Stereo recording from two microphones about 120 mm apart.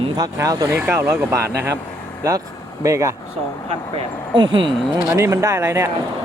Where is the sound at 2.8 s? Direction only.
25° right (ahead or behind).